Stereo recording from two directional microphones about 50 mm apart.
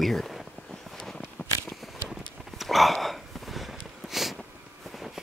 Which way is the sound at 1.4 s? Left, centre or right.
Left.